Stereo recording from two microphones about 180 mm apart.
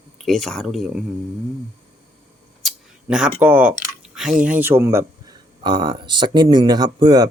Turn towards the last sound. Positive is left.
turn(degrees=-20)  # may be behind; listen again after turning